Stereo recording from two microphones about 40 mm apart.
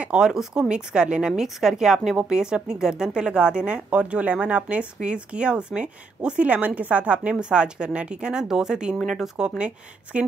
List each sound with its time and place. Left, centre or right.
0.1 s a woman's voice: centre
1.3 s a woman's voice: centre; by 7.3 s right
7.3 s a woman's voice: right
9.0 s speech: centre
10.1 s speech: right